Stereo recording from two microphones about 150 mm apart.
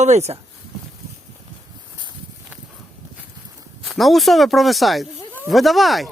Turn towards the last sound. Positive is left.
turn(degrees=0)  # may be behind; listen again after turning